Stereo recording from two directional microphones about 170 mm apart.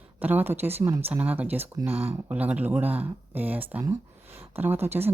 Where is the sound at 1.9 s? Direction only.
35° right (ahead or behind).